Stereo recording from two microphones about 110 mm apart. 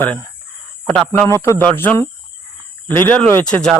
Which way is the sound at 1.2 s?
25° left (ahead or behind).